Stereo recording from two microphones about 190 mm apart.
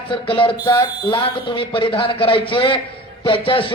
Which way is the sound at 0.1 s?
25° left (ahead or behind).